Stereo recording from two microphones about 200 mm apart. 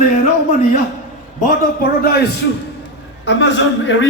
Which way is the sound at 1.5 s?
50° left (ahead or behind).